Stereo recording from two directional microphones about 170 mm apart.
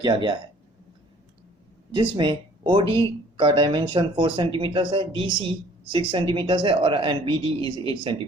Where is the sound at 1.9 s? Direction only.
30° right (ahead or behind).